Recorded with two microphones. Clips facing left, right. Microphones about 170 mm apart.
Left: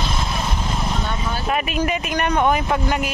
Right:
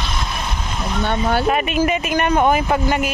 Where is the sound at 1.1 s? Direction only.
65° right (ahead or behind).